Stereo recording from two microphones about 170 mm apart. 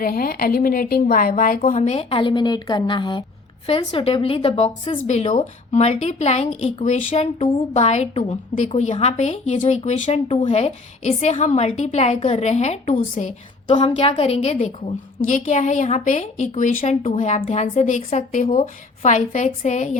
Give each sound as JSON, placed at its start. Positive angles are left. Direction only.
{"t": 0.0, "sound": "a woman's voice", "side_deg": 60}
{"t": 15.3, "sound": "speech", "side_deg": 45}